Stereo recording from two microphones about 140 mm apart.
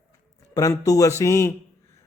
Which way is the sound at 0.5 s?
25° left (ahead or behind).